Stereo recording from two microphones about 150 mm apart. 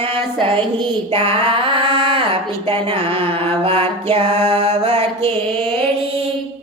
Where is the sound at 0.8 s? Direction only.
40° right (ahead or behind).